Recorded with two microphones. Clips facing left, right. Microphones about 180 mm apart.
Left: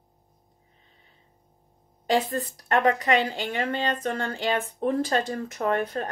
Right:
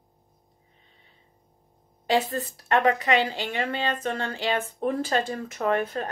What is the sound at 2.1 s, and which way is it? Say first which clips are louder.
A woman's voice: even; 35° left (ahead or behind).